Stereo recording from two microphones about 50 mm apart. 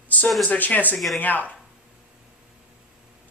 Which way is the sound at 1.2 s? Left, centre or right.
Left.